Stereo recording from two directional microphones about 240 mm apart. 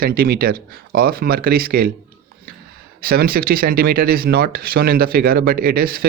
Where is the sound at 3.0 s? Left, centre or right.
Right.